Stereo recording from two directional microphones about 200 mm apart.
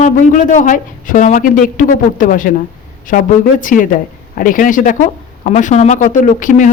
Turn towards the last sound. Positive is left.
turn(degrees=40)  # may be behind; listen again after turning